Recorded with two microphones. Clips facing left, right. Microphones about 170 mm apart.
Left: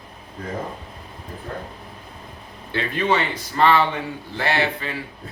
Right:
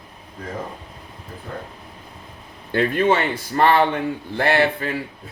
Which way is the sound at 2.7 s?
50° right (ahead or behind).